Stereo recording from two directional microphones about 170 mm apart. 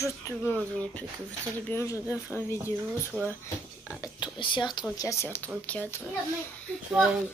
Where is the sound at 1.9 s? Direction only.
10° right (ahead or behind).